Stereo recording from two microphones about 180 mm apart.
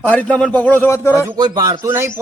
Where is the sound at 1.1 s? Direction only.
20° right (ahead or behind).